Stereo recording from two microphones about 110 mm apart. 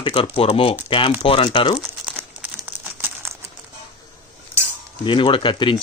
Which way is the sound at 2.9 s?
20° right (ahead or behind).